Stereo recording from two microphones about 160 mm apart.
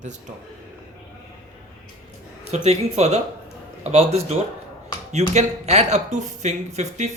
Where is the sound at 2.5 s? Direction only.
40° right (ahead or behind).